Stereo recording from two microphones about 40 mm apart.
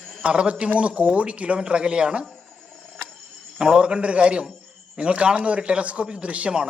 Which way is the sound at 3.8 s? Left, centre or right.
Right.